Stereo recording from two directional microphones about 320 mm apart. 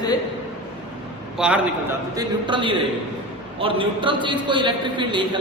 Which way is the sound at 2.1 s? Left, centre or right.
Centre.